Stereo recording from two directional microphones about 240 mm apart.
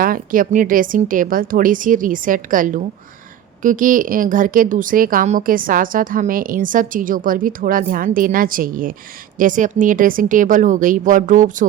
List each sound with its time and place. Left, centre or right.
0.0 s a woman's voice: right